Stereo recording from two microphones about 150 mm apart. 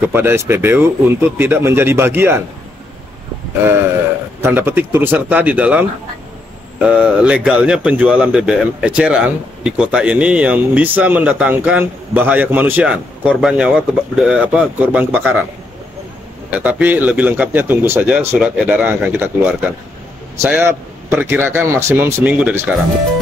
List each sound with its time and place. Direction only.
0.0 s speech: 15° right (ahead or behind)
4.4 s speech: 15° right (ahead or behind)
16.4 s speech: 10° right (ahead or behind)